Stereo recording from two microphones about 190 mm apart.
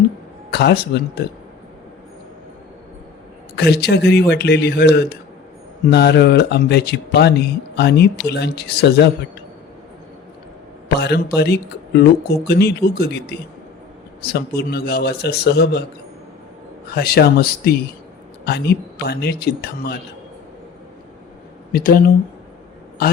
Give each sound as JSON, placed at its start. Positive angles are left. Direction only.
{"t": 0.5, "sound": "speech", "side_deg": 55}
{"t": 3.5, "sound": "speech", "side_deg": 60}
{"t": 10.8, "sound": "a man's voice", "side_deg": 60}
{"t": 16.9, "sound": "speech", "side_deg": 55}
{"t": 21.7, "sound": "speech", "side_deg": 50}